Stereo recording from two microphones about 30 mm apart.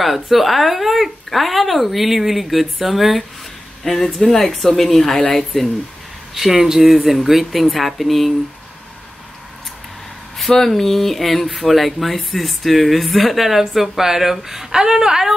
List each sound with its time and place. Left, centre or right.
0.0 s speech: centre
3.8 s speech: centre
6.3 s speech: centre
10.5 s speech: centre
13.5 s speech: centre